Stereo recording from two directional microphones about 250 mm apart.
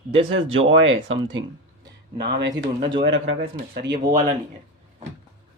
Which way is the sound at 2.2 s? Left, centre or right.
Right.